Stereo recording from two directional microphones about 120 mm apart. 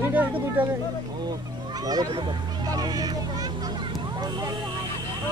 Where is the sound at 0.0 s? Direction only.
15° right (ahead or behind).